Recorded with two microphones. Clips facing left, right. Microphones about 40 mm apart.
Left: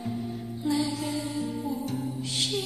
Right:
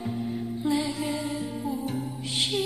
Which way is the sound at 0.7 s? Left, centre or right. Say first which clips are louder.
Even; right.